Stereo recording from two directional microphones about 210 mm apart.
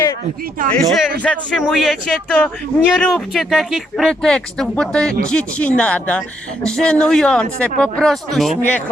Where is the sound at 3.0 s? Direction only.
Centre (ahead or behind).